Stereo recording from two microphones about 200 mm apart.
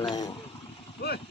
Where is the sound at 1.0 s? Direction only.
55° left (ahead or behind).